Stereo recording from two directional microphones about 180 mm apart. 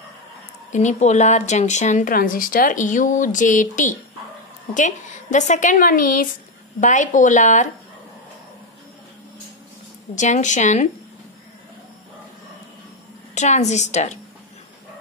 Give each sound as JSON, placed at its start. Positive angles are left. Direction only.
{"t": 0.7, "sound": "speech", "side_deg": 40}
{"t": 10.1, "sound": "speech", "side_deg": 45}
{"t": 13.3, "sound": "a woman's voice", "side_deg": 40}